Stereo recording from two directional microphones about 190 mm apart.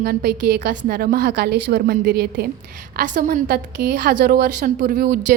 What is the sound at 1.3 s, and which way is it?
A woman's voice, 60° right (ahead or behind).